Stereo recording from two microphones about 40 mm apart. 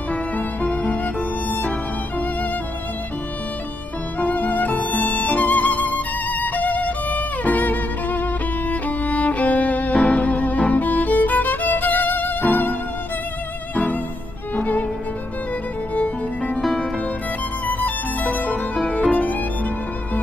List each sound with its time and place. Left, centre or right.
0.1 s music: left
4.2 s music: left
14.6 s music: left
15.9 s music: left
17.6 s music: left
18.9 s violin: left